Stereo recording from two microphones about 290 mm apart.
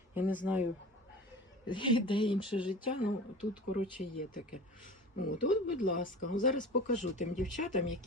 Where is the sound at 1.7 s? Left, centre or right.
Centre.